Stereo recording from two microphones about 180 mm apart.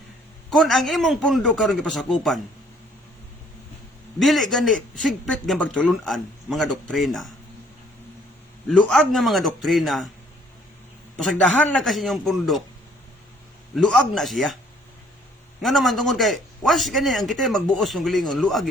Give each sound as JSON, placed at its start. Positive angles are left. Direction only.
{"t": 0.5, "sound": "speech", "side_deg": 0}
{"t": 4.2, "sound": "speech", "side_deg": 0}
{"t": 8.9, "sound": "speech", "side_deg": 0}
{"t": 11.2, "sound": "speech", "side_deg": 5}
{"t": 13.7, "sound": "speech", "side_deg": 0}
{"t": 15.6, "sound": "speech", "side_deg": 0}